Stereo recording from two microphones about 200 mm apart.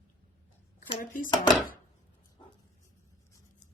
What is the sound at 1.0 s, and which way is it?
Speech, 40° left (ahead or behind).